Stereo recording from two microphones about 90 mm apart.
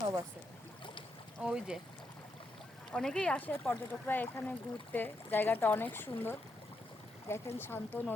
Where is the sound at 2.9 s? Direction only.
10° left (ahead or behind).